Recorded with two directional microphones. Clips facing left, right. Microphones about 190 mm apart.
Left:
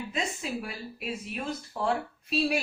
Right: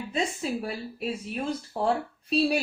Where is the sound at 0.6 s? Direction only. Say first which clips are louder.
Right 5 dB; 35° right (ahead or behind).